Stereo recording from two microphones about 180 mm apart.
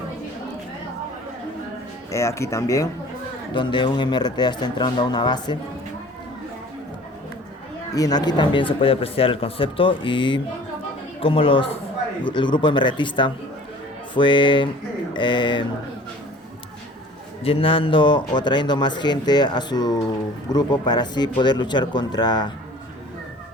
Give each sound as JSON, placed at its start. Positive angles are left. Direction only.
{"t": 2.0, "sound": "speech", "side_deg": 15}
{"t": 7.9, "sound": "speech", "side_deg": 20}
{"t": 17.4, "sound": "speech", "side_deg": 30}